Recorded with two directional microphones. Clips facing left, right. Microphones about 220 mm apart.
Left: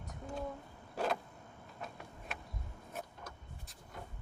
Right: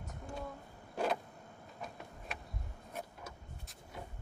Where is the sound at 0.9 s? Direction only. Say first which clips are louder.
Right 1 dB; 5° right (ahead or behind).